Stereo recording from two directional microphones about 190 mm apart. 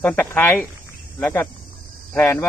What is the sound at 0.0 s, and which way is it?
Speech, 10° left (ahead or behind).